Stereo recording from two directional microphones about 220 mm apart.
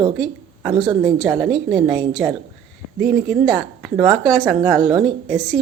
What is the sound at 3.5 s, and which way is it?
Speech, 10° right (ahead or behind).